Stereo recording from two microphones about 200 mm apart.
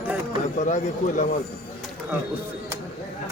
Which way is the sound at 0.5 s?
35° left (ahead or behind).